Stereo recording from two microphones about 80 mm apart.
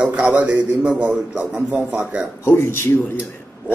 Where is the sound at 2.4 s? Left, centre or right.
Left.